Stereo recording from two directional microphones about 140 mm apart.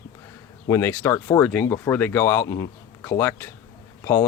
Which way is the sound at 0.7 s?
20° left (ahead or behind).